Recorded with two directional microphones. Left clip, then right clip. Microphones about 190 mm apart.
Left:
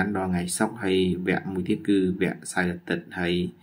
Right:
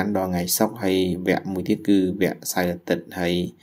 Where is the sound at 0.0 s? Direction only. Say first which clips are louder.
Right 3 dB; 15° right (ahead or behind).